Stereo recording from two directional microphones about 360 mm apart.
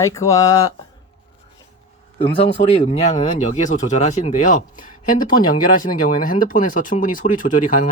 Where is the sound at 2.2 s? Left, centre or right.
Centre.